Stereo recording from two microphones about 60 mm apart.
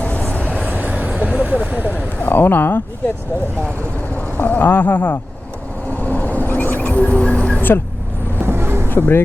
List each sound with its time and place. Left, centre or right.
0.3 s vehicle: left
0.7 s vehicle: right
1.8 s a sound: left
4.4 s speech: left
5.9 s a sound: left
8.4 s vehicle: right
8.9 s speech: left